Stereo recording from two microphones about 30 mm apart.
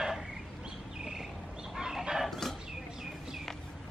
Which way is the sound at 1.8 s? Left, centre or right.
Centre.